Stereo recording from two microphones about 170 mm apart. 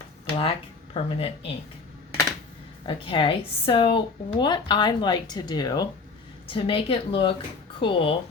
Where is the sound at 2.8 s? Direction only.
30° left (ahead or behind).